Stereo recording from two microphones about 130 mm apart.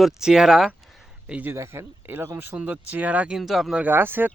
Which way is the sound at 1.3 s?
15° right (ahead or behind).